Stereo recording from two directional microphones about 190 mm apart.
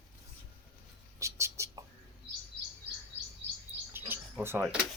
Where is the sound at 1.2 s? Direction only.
15° right (ahead or behind).